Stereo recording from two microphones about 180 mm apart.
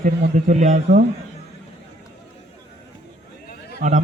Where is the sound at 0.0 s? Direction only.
45° right (ahead or behind).